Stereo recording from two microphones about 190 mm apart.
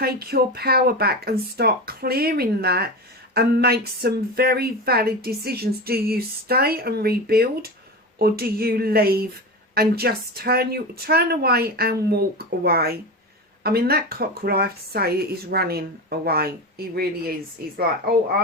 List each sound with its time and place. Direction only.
0.0 s a woman's voice: 55° right (ahead or behind)